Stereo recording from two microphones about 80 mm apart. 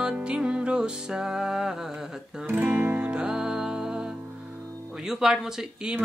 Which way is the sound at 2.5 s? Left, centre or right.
Right.